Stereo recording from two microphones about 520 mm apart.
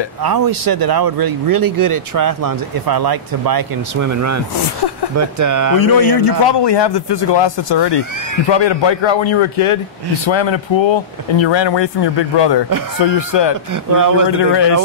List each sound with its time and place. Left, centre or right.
0.2 s a man's voice: right
5.9 s a man's voice: left